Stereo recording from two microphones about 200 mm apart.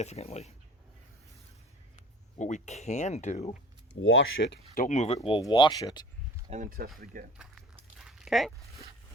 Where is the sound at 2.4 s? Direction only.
35° left (ahead or behind).